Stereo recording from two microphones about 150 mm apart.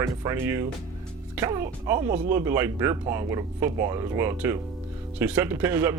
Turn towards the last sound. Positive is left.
turn(degrees=-15)  # may be behind; listen again after turning